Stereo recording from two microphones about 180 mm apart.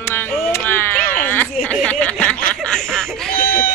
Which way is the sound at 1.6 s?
5° left (ahead or behind).